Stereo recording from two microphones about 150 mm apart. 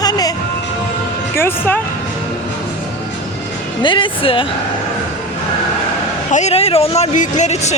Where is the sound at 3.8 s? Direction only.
35° left (ahead or behind).